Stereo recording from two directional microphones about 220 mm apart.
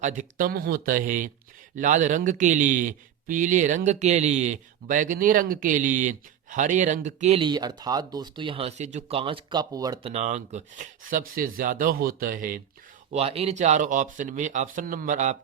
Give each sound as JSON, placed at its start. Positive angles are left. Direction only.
{"t": 0.0, "sound": "a man's voice", "side_deg": -35}
{"t": 10.1, "sound": "a man's voice", "side_deg": -30}
{"t": 13.1, "sound": "a man's voice", "side_deg": -25}